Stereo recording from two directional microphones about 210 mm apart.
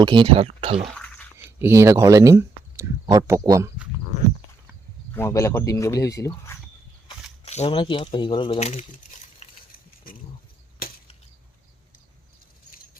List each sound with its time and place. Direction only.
0.0 s speech: 20° right (ahead or behind)
0.8 s toothbrush: 5° left (ahead or behind)
1.4 s speech: 10° right (ahead or behind)
5.1 s speech: 10° left (ahead or behind)
7.4 s speech: 30° left (ahead or behind)
9.4 s a sound: 35° left (ahead or behind)